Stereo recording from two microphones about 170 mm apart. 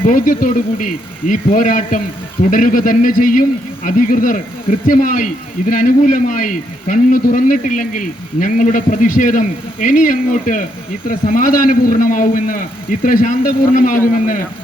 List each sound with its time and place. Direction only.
0.0 s speech: 55° left (ahead or behind)